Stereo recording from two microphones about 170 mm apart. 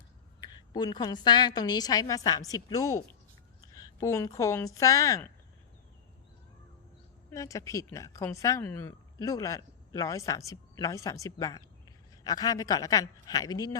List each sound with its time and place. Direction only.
0.4 s a woman's voice: 25° left (ahead or behind)
7.3 s a woman's voice: 20° left (ahead or behind)